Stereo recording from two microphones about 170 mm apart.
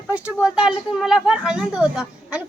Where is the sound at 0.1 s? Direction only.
10° right (ahead or behind).